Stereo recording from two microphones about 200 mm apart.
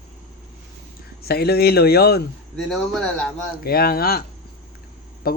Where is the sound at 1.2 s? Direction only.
50° left (ahead or behind).